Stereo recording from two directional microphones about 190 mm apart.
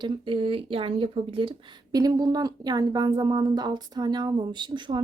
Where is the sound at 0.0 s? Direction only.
25° right (ahead or behind).